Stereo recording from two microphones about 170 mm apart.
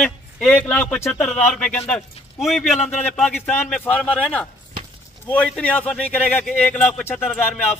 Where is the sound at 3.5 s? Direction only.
10° left (ahead or behind).